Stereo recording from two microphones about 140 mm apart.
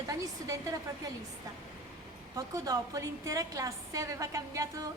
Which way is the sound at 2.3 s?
25° right (ahead or behind).